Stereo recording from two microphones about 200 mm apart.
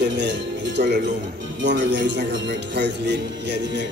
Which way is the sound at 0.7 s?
55° right (ahead or behind).